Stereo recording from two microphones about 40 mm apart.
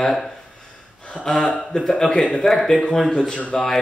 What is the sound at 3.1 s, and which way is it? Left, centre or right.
Speech, left.